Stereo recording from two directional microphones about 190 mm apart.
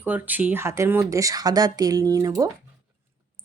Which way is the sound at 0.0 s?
10° right (ahead or behind).